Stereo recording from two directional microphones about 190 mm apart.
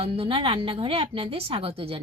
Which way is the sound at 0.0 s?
30° right (ahead or behind).